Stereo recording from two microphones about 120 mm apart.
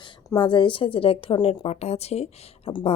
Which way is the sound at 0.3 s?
40° left (ahead or behind).